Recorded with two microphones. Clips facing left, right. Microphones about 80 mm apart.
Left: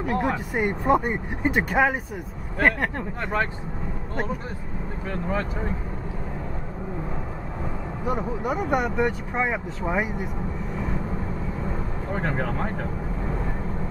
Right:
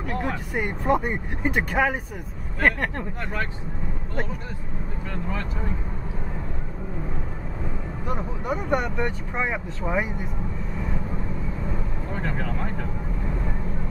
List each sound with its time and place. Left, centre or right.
0.0 s speech: centre
8.1 s speech: centre
12.1 s speech: left